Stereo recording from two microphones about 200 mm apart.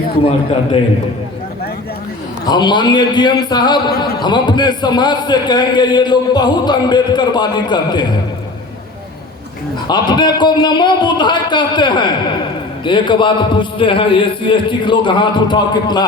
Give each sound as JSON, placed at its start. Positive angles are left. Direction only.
{"t": 2.5, "sound": "a man's voice", "side_deg": 20}
{"t": 9.8, "sound": "a man's voice", "side_deg": 20}